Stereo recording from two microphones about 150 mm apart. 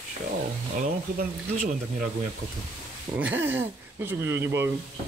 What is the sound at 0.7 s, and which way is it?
Speech, 60° right (ahead or behind).